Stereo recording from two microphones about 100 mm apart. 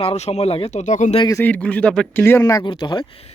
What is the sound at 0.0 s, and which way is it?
Speech, 90° left.